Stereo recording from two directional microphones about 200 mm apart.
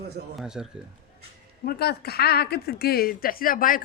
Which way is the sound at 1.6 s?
50° left (ahead or behind).